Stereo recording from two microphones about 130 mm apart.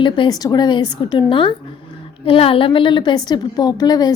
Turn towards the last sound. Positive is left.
turn(degrees=30)  # may be behind; listen again after turning